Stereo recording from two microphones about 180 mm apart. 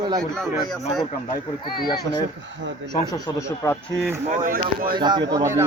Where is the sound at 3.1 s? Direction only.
20° left (ahead or behind).